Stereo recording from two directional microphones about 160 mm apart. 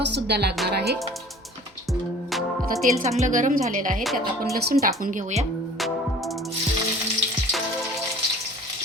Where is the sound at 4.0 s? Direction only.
Centre (ahead or behind).